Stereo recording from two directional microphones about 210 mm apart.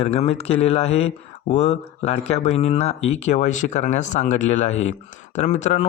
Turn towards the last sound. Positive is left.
turn(degrees=35)  # may be behind; listen again after turning